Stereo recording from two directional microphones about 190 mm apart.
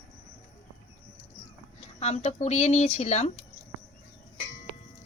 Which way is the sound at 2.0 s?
35° left (ahead or behind).